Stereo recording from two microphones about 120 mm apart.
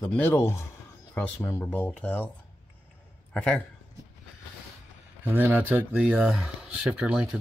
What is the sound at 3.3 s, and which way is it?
Speech, 5° left (ahead or behind).